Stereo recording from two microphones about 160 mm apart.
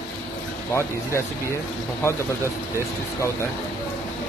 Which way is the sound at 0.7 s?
15° left (ahead or behind).